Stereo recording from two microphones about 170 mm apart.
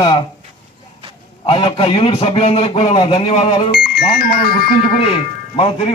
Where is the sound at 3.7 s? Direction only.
65° left (ahead or behind).